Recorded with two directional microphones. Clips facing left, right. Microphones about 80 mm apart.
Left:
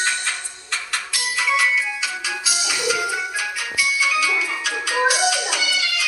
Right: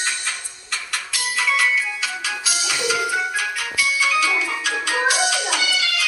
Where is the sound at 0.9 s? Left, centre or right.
Centre.